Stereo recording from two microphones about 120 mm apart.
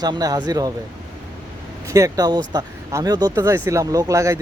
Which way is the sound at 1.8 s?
25° right (ahead or behind).